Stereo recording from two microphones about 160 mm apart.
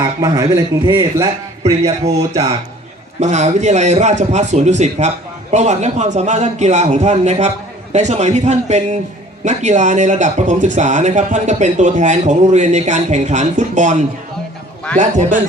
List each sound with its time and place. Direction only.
0.0 s a man's voice: 20° right (ahead or behind)
1.8 s a man's voice: 40° right (ahead or behind)